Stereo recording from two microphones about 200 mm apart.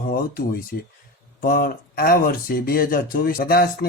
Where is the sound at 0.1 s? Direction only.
45° left (ahead or behind).